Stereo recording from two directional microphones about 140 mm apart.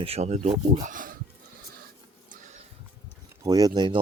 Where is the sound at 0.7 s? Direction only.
65° right (ahead or behind); by 1.2 s 80° right.